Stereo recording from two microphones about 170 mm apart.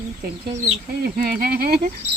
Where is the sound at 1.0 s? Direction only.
60° right (ahead or behind).